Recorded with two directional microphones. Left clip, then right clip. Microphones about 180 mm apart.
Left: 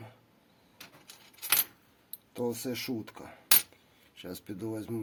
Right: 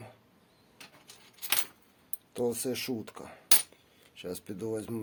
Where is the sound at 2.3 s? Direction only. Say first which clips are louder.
Right 2 dB; 20° right (ahead or behind).